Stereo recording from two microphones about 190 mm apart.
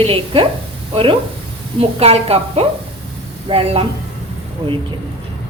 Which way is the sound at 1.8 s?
30° right (ahead or behind).